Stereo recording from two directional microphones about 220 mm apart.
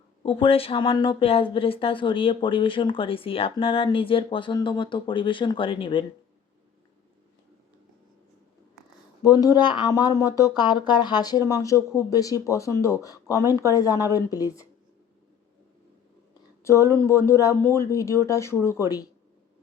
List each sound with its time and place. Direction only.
0.2 s speech: 25° left (ahead or behind)
9.2 s speech: 15° left (ahead or behind)
16.6 s speech: 15° left (ahead or behind)